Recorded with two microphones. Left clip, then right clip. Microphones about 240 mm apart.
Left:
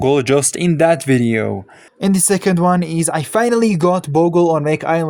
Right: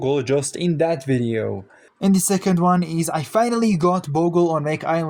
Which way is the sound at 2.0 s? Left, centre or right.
Left.